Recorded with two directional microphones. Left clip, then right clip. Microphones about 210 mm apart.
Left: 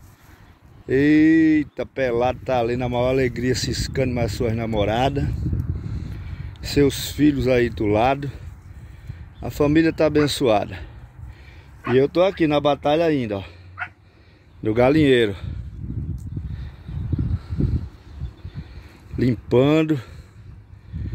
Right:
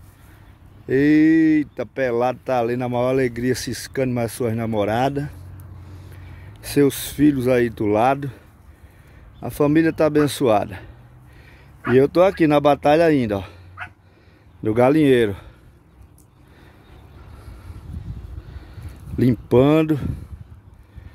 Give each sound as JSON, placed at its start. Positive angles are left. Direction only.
{"t": 0.8, "sound": "speech", "side_deg": 0}
{"t": 6.3, "sound": "speech", "side_deg": 0}
{"t": 9.4, "sound": "speech", "side_deg": -5}
{"t": 11.9, "sound": "speech", "side_deg": -15}
{"t": 14.6, "sound": "speech", "side_deg": -5}
{"t": 19.1, "sound": "speech", "side_deg": -15}